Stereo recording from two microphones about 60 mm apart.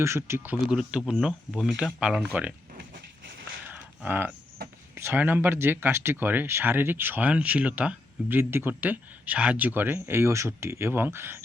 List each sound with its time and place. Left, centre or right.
0.0 s speech: right
0.7 s speech: centre
3.7 s a sound: right
4.9 s speech: right
7.2 s speech: right
8.9 s speech: right